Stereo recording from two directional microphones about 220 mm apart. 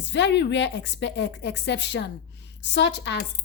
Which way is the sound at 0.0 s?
55° left (ahead or behind).